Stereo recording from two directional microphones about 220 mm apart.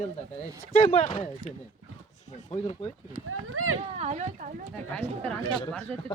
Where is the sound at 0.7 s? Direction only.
35° left (ahead or behind).